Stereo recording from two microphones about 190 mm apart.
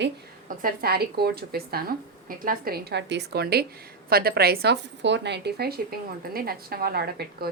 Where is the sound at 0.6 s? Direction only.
55° right (ahead or behind).